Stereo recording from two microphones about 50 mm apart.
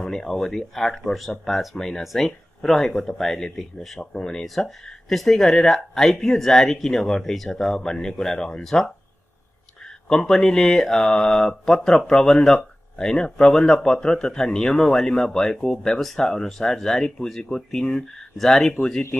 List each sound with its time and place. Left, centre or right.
0.0 s speech: centre
4.0 s speech: centre
10.0 s speech: centre